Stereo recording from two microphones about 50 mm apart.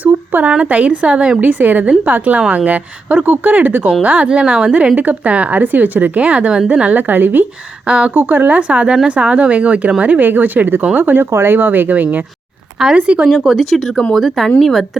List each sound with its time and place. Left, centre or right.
0.0 s a sound: right
0.6 s a woman's voice: right
1.4 s a woman's voice: right
4.0 s a woman's voice: right
4.9 s a woman's voice: right
7.9 s a woman's voice: right
8.1 s a woman's voice: right
11.3 s speech: right
11.5 s a woman's voice: right
13.5 s speech: centre